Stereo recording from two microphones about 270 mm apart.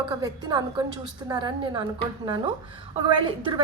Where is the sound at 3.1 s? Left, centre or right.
Centre.